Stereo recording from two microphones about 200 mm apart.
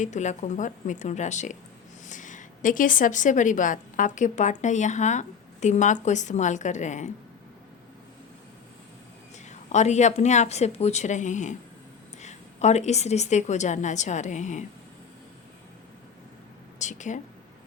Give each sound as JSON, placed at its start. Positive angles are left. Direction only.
{"t": 0.0, "sound": "a woman's voice", "side_deg": 35}
{"t": 9.5, "sound": "a woman's voice", "side_deg": 35}
{"t": 16.7, "sound": "speech", "side_deg": 35}